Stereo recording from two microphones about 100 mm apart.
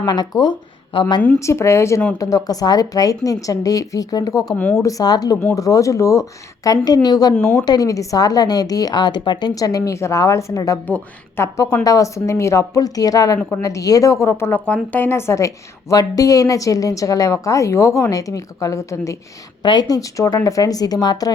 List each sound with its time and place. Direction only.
0.0 s a woman's voice: 45° left (ahead or behind)
1.4 s a woman's voice: 30° left (ahead or behind)
6.8 s a woman's voice: 40° left (ahead or behind)
10.8 s speech: 15° left (ahead or behind)
11.5 s a woman's voice: 35° left (ahead or behind)
19.6 s a woman's voice: 45° left (ahead or behind)